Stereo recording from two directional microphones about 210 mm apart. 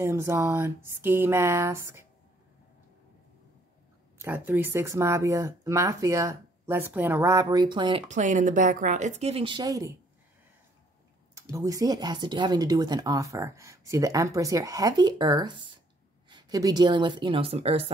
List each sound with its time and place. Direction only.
0.0 s speech: 15° right (ahead or behind)
4.2 s speech: 10° right (ahead or behind)
8.1 s speech: 35° right (ahead or behind); by 9.9 s 15° right (ahead or behind)
11.5 s speech: 15° right (ahead or behind)